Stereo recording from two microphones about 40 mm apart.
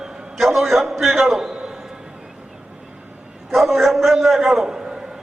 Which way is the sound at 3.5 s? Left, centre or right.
Centre.